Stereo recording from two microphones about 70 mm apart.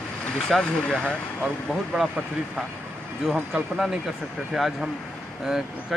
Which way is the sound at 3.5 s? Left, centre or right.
Centre.